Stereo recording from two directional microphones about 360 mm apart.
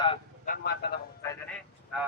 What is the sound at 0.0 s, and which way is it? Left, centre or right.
Vehicle, centre.